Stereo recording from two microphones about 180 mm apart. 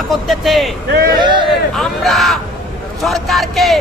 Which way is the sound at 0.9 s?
55° right (ahead or behind).